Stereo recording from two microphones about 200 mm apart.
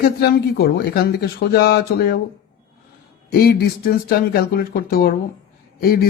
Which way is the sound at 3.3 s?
50° left (ahead or behind).